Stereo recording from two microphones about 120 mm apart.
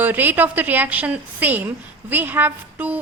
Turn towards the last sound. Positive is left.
turn(degrees=-15)  # may be behind; listen again after turning